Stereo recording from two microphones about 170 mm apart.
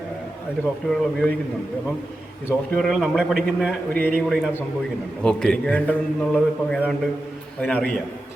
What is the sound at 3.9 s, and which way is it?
Speech, 60° right (ahead or behind).